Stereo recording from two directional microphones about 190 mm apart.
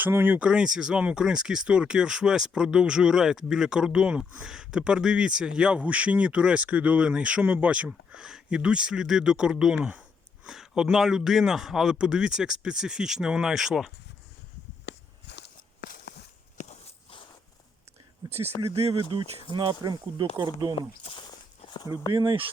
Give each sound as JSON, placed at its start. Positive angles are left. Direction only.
{"t": 0.0, "sound": "speech", "side_deg": -10}
{"t": 14.8, "sound": "walk", "side_deg": 60}
{"t": 16.6, "sound": "walk", "side_deg": 35}
{"t": 19.1, "sound": "speech", "side_deg": -25}
{"t": 20.7, "sound": "walk", "side_deg": 30}
{"t": 22.1, "sound": "speech", "side_deg": -25}